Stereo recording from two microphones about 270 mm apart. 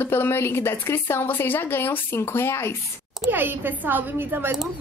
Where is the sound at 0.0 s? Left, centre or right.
Centre.